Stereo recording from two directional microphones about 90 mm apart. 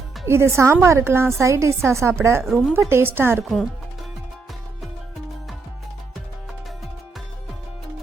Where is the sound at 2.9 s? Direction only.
25° right (ahead or behind).